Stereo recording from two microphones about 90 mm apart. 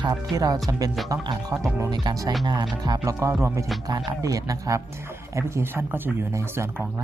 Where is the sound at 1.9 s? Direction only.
50° right (ahead or behind).